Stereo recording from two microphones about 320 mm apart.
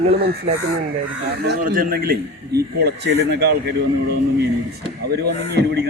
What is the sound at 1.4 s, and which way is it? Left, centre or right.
A man's voice, right.